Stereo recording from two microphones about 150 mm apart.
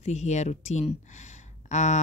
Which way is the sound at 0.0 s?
50° left (ahead or behind).